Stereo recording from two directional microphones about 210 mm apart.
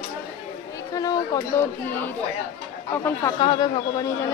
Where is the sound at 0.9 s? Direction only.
20° left (ahead or behind).